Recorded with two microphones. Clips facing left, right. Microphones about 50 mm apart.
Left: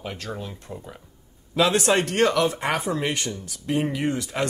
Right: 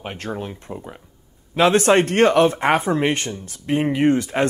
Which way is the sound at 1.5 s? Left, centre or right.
Right.